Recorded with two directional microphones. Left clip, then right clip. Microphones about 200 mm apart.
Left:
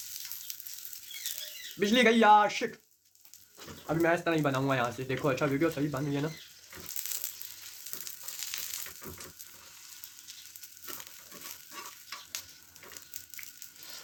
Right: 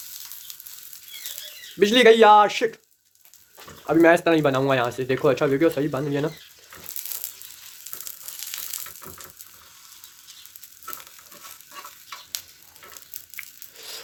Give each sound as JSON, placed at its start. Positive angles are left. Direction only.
{"t": 0.5, "sound": "sizzle", "side_deg": -10}
{"t": 1.8, "sound": "speech", "side_deg": -40}
{"t": 3.8, "sound": "speech", "side_deg": -50}